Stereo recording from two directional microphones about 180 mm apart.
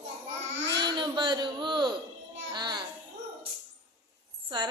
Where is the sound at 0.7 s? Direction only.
25° right (ahead or behind).